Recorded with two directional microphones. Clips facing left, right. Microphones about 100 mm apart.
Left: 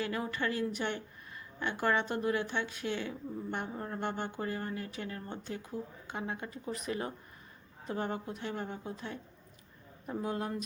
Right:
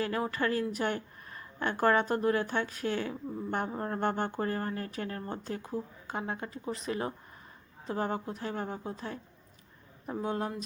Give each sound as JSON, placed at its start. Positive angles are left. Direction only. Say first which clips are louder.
{"t": 0.0, "sound": "speech", "louder": "right 4 dB", "side_deg": -35}